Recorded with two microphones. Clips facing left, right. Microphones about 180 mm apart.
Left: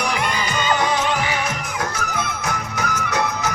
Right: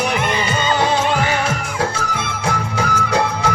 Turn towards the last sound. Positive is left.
turn(degrees=-30)  # may be behind; listen again after turning